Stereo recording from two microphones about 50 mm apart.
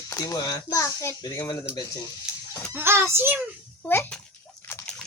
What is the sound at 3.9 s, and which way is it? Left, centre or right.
Speech, left.